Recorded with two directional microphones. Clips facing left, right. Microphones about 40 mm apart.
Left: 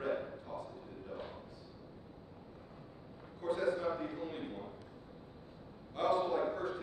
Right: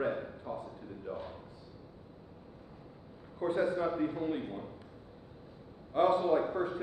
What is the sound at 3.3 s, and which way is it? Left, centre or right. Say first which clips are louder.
A man's voice: right 4 dB; right.